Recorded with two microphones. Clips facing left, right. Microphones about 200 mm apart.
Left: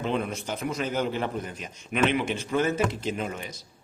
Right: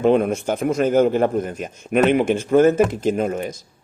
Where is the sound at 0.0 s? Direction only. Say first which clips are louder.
Right 12 dB; 50° right (ahead or behind).